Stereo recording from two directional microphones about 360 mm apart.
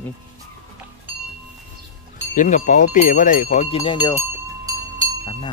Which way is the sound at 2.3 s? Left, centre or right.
Left.